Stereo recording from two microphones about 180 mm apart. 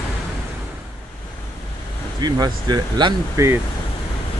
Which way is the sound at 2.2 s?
20° right (ahead or behind).